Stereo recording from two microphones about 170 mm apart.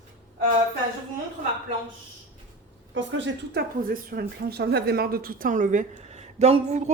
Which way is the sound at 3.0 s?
90° right.